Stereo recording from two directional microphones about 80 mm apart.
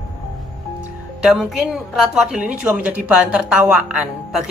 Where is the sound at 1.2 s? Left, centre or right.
Centre.